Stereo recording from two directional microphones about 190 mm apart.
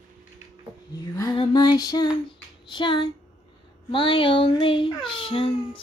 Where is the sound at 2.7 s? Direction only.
25° left (ahead or behind).